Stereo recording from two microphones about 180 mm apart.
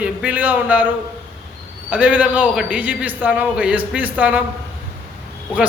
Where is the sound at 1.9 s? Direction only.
10° right (ahead or behind).